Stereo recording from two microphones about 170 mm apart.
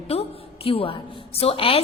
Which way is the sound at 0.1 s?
35° left (ahead or behind).